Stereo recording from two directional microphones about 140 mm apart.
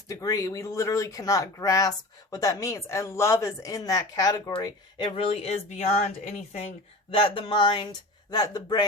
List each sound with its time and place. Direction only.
0.1 s speech: 25° left (ahead or behind)
4.6 s speech: 35° left (ahead or behind); by 6.7 s 55° left (ahead or behind)
7.1 s speech: 40° left (ahead or behind)